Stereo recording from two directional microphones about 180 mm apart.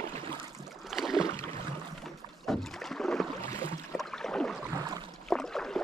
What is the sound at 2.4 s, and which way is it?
Rowboat, 5° left (ahead or behind).